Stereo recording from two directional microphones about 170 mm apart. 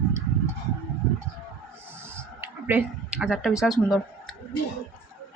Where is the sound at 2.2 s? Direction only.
10° right (ahead or behind).